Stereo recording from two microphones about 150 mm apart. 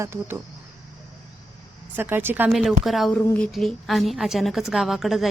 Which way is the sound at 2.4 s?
Centre (ahead or behind).